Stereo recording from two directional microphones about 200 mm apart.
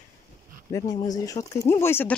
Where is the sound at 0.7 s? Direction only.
20° left (ahead or behind).